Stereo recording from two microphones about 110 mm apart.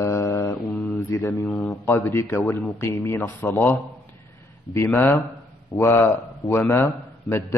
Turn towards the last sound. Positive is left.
turn(degrees=25)  # may be behind; listen again after turning